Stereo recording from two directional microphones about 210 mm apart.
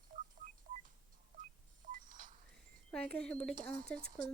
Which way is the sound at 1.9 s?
40° right (ahead or behind).